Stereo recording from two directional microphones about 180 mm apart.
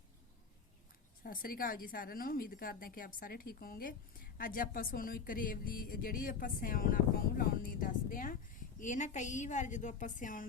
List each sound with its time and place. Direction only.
1.2 s a woman's voice: 55° left (ahead or behind)